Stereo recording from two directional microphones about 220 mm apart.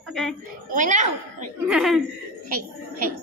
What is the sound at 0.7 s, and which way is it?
Speech, 35° right (ahead or behind).